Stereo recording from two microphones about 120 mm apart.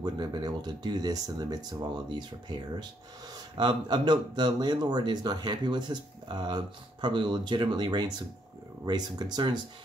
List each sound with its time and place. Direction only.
0.0 s speech: 35° right (ahead or behind)
3.5 s speech: 40° right (ahead or behind)